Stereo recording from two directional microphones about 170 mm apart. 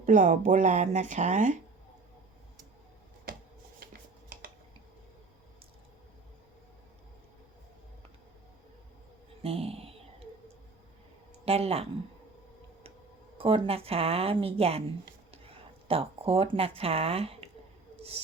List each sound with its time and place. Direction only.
0.0 s speech: 50° right (ahead or behind)
9.4 s a sound: 35° right (ahead or behind)
11.4 s speech: 35° right (ahead or behind)
13.4 s speech: 35° right (ahead or behind)